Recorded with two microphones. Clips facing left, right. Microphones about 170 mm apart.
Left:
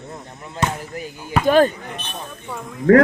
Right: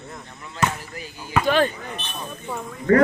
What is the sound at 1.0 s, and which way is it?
Speech, 50° left (ahead or behind).